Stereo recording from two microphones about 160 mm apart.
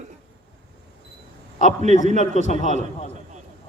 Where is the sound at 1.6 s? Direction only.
50° right (ahead or behind).